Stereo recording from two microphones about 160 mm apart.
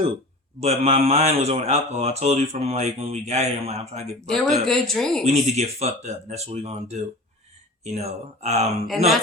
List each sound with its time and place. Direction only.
0.6 s speech: 40° right (ahead or behind)
4.3 s speech: centre (ahead or behind)
5.2 s speech: 45° right (ahead or behind)